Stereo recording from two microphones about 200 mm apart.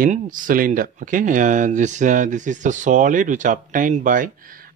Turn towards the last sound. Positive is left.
turn(degrees=-40)  # may be behind; listen again after turning